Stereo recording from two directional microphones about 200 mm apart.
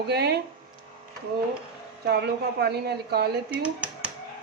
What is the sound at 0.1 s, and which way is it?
Speech, 55° right (ahead or behind).